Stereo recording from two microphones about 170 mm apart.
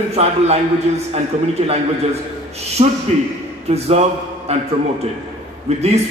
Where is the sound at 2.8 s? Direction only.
35° right (ahead or behind).